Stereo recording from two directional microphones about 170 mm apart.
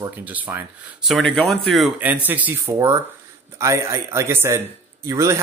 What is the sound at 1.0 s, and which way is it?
Speech, centre (ahead or behind).